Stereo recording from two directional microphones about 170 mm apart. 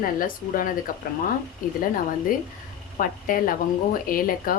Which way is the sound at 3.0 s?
55° left (ahead or behind).